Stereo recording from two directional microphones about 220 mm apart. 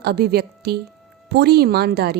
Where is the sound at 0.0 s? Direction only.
45° right (ahead or behind).